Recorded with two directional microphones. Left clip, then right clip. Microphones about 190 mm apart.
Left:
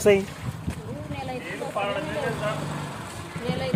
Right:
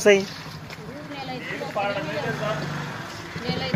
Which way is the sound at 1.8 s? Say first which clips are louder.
Right 2 dB; 35° right (ahead or behind).